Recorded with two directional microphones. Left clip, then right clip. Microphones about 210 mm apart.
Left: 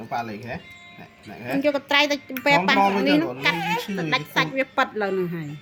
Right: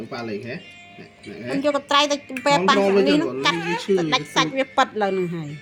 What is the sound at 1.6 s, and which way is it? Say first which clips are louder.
A woman's voice: right 1 dB; 5° left (ahead or behind).